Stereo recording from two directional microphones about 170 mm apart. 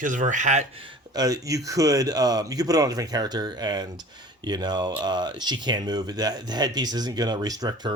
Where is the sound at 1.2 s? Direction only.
20° right (ahead or behind).